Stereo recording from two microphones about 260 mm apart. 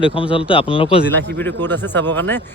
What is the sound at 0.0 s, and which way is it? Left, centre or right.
Speech, left.